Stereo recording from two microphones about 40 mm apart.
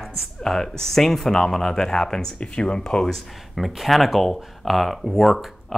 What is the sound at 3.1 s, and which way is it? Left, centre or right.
Speech, centre.